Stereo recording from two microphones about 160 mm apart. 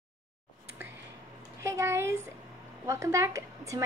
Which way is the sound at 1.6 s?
15° right (ahead or behind).